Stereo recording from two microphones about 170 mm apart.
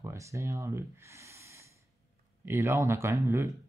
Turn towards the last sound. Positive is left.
turn(degrees=-15)  # may be behind; listen again after turning